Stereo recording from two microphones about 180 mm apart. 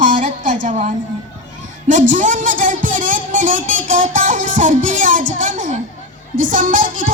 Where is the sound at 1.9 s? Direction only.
45° right (ahead or behind).